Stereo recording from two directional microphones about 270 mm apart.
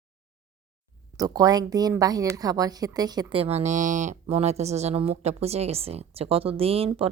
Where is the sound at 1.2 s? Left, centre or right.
Centre.